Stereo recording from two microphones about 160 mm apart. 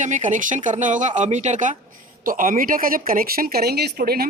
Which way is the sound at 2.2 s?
60° right (ahead or behind).